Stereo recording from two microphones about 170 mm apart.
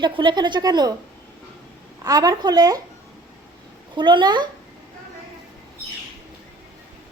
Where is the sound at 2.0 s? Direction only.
20° right (ahead or behind).